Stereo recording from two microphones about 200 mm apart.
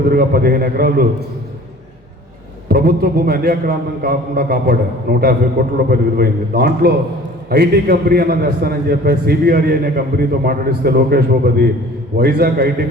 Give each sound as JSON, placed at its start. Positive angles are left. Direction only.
{"t": 0.1, "sound": "a man's voice", "side_deg": -50}
{"t": 2.6, "sound": "a man's voice", "side_deg": -50}